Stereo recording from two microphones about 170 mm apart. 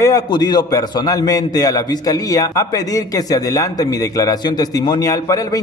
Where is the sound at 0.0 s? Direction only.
20° left (ahead or behind).